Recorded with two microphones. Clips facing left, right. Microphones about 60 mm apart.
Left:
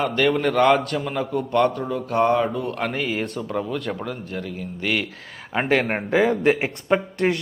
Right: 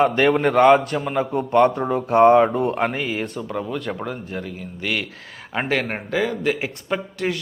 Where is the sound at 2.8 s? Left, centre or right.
Centre.